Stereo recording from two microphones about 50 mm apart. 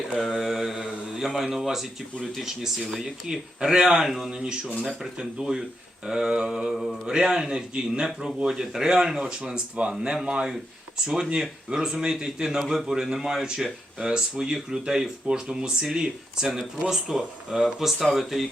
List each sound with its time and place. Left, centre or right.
0.1 s mantra: centre
1.5 s speech: centre
6.7 s speech: centre
7.1 s speech: centre